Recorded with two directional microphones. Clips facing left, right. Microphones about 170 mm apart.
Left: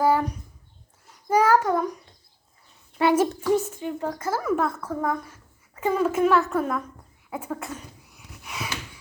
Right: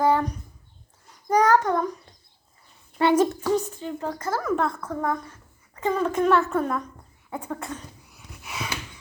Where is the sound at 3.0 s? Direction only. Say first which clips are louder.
Right 1 dB; 5° left (ahead or behind).